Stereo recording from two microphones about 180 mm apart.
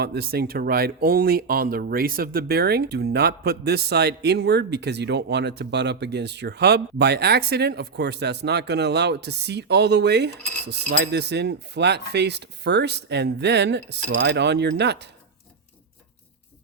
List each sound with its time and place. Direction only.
0.0 s speech: 60° right (ahead or behind)